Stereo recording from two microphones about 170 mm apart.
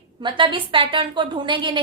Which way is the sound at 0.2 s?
30° right (ahead or behind).